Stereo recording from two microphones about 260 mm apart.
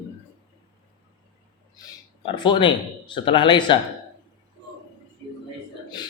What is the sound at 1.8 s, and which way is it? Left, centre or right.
Speech, centre.